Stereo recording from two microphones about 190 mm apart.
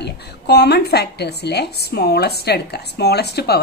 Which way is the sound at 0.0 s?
60° left (ahead or behind).